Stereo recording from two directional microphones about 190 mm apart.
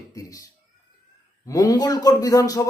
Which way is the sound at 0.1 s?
20° left (ahead or behind).